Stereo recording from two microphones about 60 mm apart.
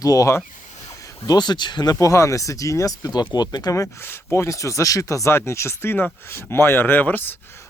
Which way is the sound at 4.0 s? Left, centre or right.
Left.